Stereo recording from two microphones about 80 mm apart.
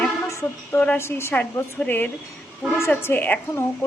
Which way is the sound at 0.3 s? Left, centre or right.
Left.